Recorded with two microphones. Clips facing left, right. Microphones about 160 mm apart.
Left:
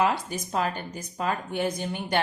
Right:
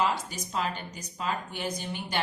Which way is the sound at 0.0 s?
50° left (ahead or behind).